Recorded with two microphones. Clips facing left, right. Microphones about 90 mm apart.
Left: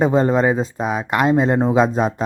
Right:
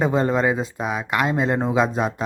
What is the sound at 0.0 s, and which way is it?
Speech, 25° left (ahead or behind).